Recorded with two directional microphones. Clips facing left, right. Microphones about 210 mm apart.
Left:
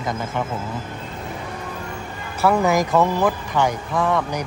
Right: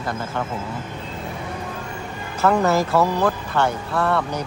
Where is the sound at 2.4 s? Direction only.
10° left (ahead or behind).